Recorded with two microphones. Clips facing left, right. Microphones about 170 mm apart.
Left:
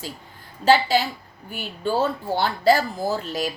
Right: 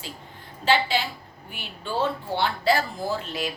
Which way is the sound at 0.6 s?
40° left (ahead or behind).